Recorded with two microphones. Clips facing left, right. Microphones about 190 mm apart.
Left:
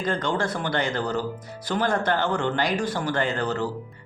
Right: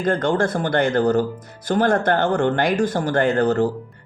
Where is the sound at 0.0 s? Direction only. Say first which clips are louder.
Right 6 dB; 50° right (ahead or behind).